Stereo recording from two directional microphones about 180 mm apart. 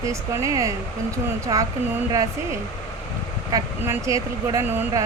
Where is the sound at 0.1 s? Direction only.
15° right (ahead or behind).